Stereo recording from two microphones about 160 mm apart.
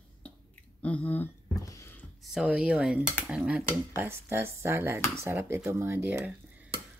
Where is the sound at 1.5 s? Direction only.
20° left (ahead or behind).